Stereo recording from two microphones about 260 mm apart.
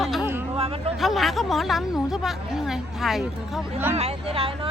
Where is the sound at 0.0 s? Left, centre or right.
Centre.